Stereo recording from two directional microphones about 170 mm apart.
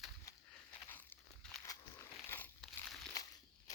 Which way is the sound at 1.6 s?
20° left (ahead or behind).